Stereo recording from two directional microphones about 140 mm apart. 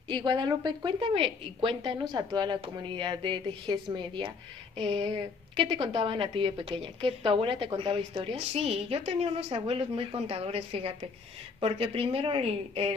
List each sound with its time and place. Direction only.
0.1 s a woman's voice: 30° right (ahead or behind)